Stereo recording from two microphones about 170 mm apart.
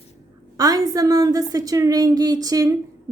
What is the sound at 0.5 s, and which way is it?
A woman's voice, 20° right (ahead or behind).